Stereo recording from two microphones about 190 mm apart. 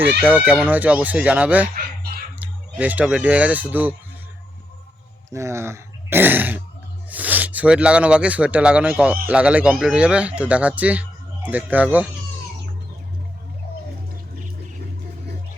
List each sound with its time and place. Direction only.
0.2 s speech: 10° right (ahead or behind)
5.3 s speech: 15° right (ahead or behind)